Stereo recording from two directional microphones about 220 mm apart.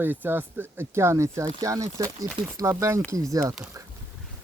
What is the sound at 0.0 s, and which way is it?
Speech, 10° right (ahead or behind).